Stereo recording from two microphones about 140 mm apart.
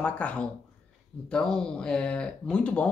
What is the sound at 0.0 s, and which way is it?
A man's voice, 10° left (ahead or behind).